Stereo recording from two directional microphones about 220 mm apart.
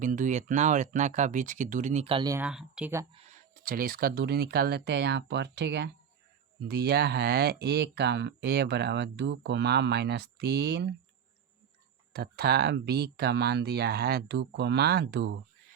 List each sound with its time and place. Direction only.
0.0 s speech: 35° right (ahead or behind); by 2.5 s 15° right (ahead or behind)
2.5 s speech: 5° right (ahead or behind)
3.1 s speech: 30° right (ahead or behind); by 10.8 s 50° right (ahead or behind)
12.1 s speech: 45° right (ahead or behind)